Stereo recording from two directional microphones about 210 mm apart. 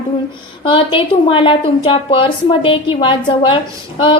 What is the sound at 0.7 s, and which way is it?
A woman's voice, 25° left (ahead or behind).